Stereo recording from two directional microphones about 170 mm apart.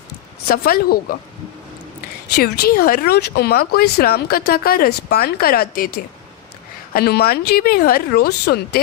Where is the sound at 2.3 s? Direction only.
65° left (ahead or behind).